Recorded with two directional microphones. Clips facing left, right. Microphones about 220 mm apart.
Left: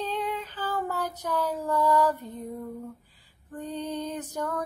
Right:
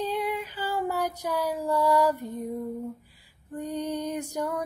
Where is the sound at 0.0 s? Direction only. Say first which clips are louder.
Right 2 dB; 10° right (ahead or behind).